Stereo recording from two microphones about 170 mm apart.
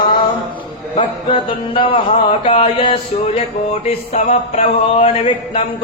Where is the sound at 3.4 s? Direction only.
40° left (ahead or behind).